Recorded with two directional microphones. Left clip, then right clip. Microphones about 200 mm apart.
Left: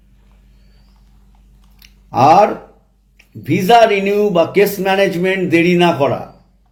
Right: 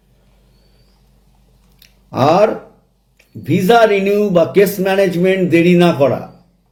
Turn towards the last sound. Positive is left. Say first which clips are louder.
# right 1 dB
turn(degrees=0)  # may be behind; listen again after turning